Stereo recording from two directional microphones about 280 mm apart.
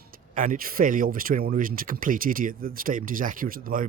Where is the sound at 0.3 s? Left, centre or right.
Right.